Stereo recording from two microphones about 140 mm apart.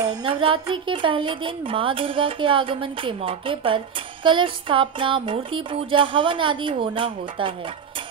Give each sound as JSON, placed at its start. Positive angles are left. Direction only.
{"t": 0.0, "sound": "a woman's voice", "side_deg": -30}